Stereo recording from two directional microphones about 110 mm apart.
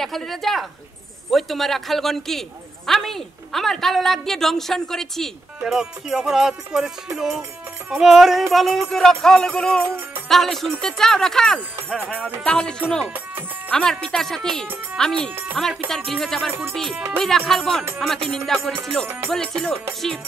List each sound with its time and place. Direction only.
0.0 s a woman's voice: centre (ahead or behind)
9.8 s music: 20° right (ahead or behind)
10.2 s music: centre (ahead or behind)
10.8 s a woman's voice: 5° left (ahead or behind)
16.9 s music: 20° right (ahead or behind)
17.5 s a woman's voice: 5° left (ahead or behind)
19.0 s music: 20° right (ahead or behind)
19.3 s a woman's voice: 5° left (ahead or behind)